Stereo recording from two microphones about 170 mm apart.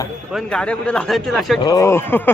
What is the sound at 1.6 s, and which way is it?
Speech, 20° left (ahead or behind).